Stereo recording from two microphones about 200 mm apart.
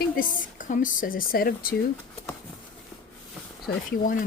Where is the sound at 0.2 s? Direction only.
40° left (ahead or behind).